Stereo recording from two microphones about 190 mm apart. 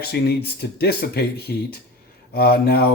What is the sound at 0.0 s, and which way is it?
Speech, 55° left (ahead or behind).